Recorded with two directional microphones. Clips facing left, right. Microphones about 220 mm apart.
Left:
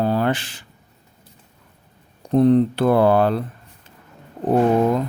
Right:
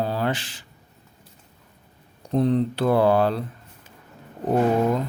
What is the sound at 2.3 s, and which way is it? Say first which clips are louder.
Speech: left 6 dB; 55° left (ahead or behind).